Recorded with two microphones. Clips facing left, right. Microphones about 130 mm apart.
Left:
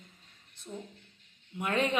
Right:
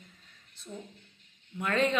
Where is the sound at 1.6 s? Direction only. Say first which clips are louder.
Right 2 dB; 15° left (ahead or behind).